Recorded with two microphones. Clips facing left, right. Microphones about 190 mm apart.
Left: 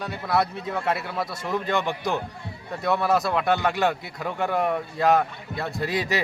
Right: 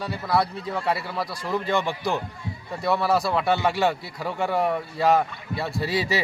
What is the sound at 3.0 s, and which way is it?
Speech, centre (ahead or behind).